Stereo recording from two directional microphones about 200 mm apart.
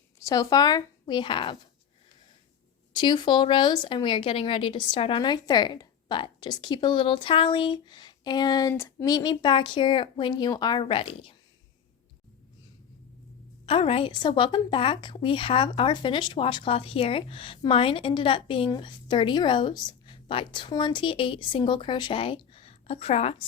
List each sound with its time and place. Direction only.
0.2 s speech: 15° left (ahead or behind)
2.9 s a woman's voice: 20° left (ahead or behind)
13.7 s a woman's voice: 30° left (ahead or behind)